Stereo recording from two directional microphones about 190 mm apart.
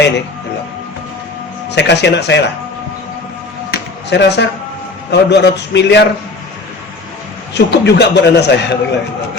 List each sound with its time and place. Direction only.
1.7 s a man's voice: 65° left (ahead or behind)
3.7 s a sound: 65° left (ahead or behind)
5.1 s a man's voice: 65° left (ahead or behind)
7.5 s a man's voice: 65° left (ahead or behind)